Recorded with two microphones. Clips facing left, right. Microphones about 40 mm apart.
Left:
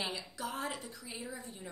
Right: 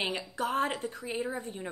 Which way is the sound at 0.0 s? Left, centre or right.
Right.